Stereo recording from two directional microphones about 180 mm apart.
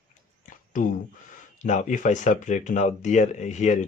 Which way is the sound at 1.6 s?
45° left (ahead or behind).